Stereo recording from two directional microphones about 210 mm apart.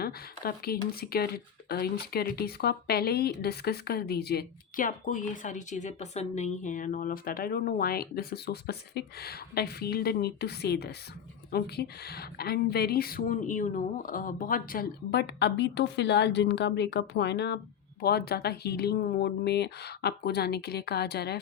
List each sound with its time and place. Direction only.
0.0 s speech: 45° left (ahead or behind)